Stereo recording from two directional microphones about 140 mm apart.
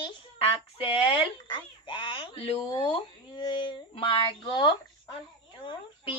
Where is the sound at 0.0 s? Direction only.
40° left (ahead or behind).